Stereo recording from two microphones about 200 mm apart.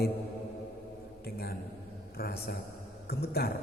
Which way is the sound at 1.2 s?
50° left (ahead or behind).